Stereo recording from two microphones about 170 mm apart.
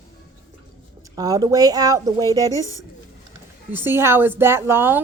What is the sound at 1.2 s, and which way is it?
A woman's voice, 20° right (ahead or behind).